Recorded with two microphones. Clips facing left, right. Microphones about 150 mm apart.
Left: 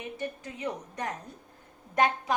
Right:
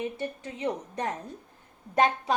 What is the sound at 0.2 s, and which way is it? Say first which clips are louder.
A woman's voice: right 2 dB; 30° right (ahead or behind).